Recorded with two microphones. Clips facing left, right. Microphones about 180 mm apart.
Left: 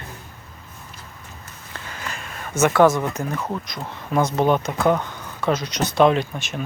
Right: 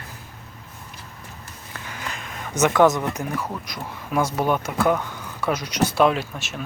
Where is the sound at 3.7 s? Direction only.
10° right (ahead or behind).